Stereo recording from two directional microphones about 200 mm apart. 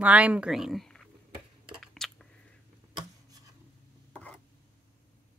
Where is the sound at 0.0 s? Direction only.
5° right (ahead or behind).